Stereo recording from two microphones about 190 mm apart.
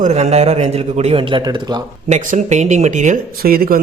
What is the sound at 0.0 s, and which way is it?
A man's voice, 35° right (ahead or behind).